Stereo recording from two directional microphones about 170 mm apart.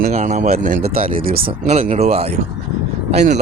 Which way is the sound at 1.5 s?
40° right (ahead or behind).